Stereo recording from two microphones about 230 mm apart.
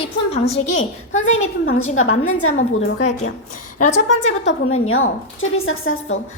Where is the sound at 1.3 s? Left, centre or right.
Left.